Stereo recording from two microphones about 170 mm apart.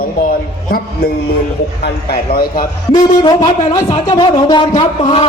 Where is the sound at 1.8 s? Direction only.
65° left (ahead or behind).